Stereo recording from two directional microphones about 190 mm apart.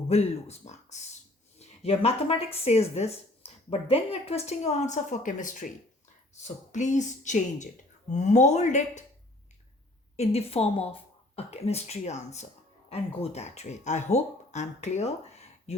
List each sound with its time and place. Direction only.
0.1 s speech: 35° left (ahead or behind)
10.2 s speech: 30° left (ahead or behind)